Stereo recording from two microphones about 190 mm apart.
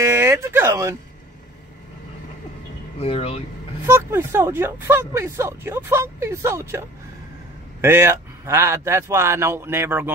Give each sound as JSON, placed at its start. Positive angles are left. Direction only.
{"t": 0.0, "sound": "a sound", "side_deg": -15}
{"t": 3.0, "sound": "speech", "side_deg": 30}
{"t": 3.8, "sound": "speech", "side_deg": -15}